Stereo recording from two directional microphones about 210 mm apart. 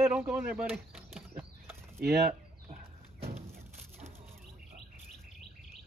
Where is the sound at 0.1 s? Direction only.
5° right (ahead or behind).